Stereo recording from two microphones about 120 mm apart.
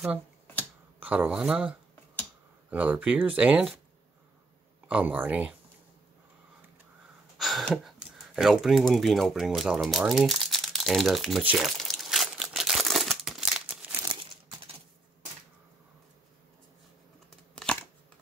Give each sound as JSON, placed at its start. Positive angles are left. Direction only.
{"t": 0.9, "sound": "speech", "side_deg": -15}
{"t": 4.8, "sound": "speech", "side_deg": -15}
{"t": 7.3, "sound": "a sound", "side_deg": 0}
{"t": 7.6, "sound": "speech", "side_deg": 0}
{"t": 11.5, "sound": "crumpling", "side_deg": 0}
{"t": 14.2, "sound": "a sound", "side_deg": -45}